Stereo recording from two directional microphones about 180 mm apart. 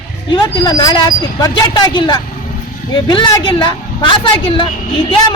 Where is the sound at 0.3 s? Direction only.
25° left (ahead or behind).